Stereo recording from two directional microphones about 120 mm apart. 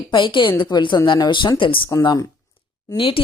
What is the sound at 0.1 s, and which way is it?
Speech, 40° left (ahead or behind).